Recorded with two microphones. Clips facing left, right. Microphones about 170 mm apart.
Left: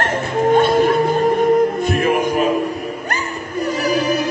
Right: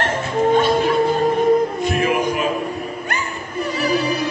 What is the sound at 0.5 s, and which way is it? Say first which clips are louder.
Music: left 4 dB; 50° left (ahead or behind).